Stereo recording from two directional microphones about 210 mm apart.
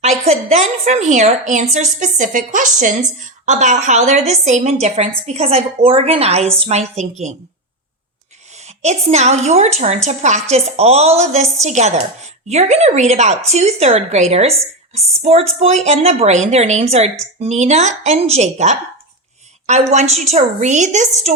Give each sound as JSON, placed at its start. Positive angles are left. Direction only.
{"t": 0.0, "sound": "a woman's voice", "side_deg": -30}
{"t": 8.5, "sound": "a woman's voice", "side_deg": -30}